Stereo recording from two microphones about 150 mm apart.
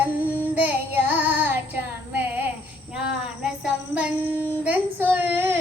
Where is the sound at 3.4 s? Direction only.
5° right (ahead or behind).